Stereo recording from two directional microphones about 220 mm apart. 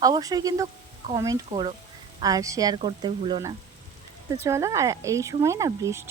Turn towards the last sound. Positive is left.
turn(degrees=-15)  # may be behind; listen again after turning